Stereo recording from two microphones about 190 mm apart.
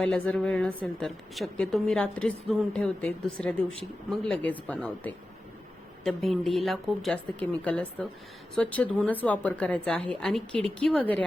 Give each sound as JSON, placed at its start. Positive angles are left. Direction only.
{"t": 0.0, "sound": "a woman's voice", "side_deg": 5}